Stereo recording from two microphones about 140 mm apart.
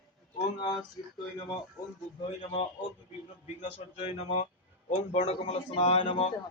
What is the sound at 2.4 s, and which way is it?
A man's voice, 40° left (ahead or behind).